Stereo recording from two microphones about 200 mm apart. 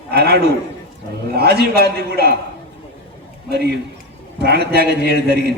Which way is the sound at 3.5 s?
55° right (ahead or behind).